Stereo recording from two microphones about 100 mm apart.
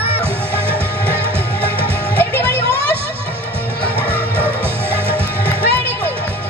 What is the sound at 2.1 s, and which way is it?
Music, 20° left (ahead or behind).